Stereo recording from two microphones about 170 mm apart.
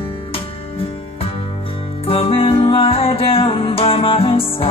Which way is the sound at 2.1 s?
35° left (ahead or behind).